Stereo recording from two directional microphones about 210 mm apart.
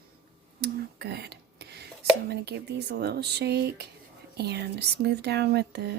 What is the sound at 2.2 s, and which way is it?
Speech, 50° right (ahead or behind).